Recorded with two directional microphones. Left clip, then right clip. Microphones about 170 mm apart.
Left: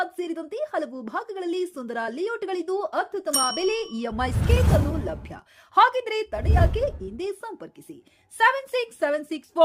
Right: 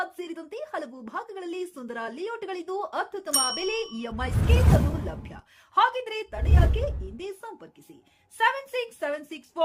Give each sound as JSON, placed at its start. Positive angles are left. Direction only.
{"t": 0.0, "sound": "a woman's voice", "side_deg": 20}